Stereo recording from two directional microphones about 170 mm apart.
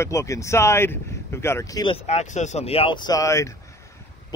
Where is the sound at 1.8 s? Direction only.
35° left (ahead or behind).